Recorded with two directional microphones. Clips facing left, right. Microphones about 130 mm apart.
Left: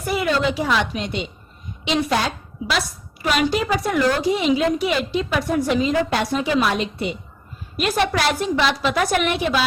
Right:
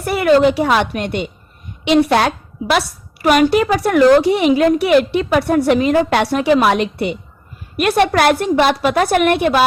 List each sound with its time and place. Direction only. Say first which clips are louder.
0.0 s a woman's voice: right 9 dB; 65° right (ahead or behind)